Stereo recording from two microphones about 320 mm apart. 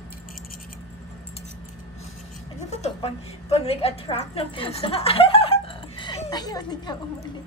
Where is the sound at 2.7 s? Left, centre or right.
Centre.